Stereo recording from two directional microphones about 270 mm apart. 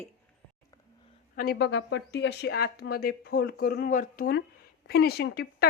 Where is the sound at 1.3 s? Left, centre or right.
Left.